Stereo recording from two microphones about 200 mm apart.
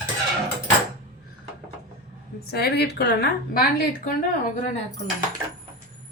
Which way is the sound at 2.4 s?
50° left (ahead or behind).